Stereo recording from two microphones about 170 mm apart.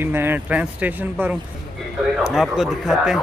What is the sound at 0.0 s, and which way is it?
Speech, 15° right (ahead or behind).